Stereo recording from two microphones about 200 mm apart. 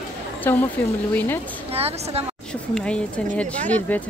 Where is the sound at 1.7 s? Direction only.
30° right (ahead or behind).